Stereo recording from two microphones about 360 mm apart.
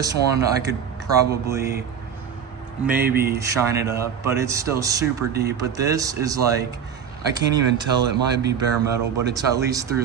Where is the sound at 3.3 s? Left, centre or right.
Centre.